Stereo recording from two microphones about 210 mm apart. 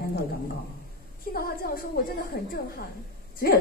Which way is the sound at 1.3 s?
45° left (ahead or behind).